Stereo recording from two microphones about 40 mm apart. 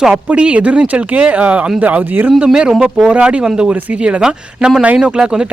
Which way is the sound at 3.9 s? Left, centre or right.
Right.